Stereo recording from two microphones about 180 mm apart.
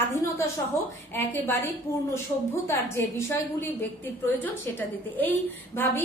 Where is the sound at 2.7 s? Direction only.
15° left (ahead or behind).